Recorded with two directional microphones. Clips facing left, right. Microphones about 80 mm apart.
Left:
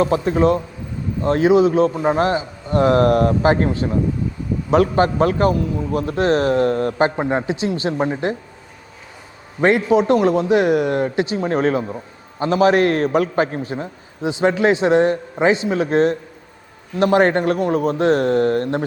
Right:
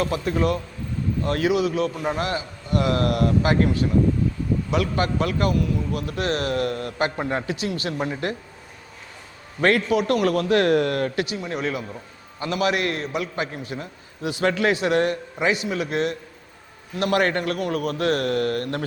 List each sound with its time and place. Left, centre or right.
0.0 s a man's voice: left
9.6 s a man's voice: centre
11.3 s a man's voice: left